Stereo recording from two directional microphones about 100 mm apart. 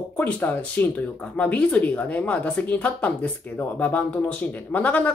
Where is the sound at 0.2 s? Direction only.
15° left (ahead or behind).